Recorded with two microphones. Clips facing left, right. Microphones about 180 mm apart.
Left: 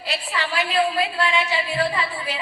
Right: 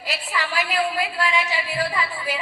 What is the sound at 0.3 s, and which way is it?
A woman's voice, 25° left (ahead or behind).